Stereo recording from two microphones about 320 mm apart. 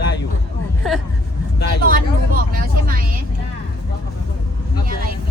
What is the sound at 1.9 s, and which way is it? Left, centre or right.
Vehicle, right.